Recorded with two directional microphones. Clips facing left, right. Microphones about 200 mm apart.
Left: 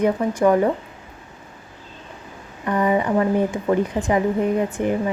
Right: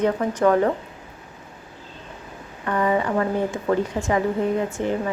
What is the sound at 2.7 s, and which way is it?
A woman's voice, 15° left (ahead or behind).